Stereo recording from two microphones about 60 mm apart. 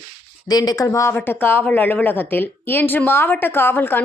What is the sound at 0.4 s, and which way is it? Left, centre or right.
Speech, left.